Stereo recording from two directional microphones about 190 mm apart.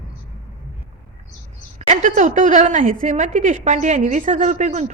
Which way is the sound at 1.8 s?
40° right (ahead or behind).